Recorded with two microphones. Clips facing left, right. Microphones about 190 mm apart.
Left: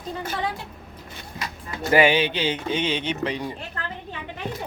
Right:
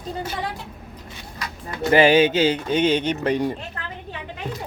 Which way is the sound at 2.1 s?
45° right (ahead or behind).